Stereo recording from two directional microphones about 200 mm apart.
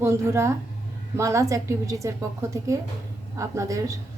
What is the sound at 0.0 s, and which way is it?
A woman's voice, 15° right (ahead or behind).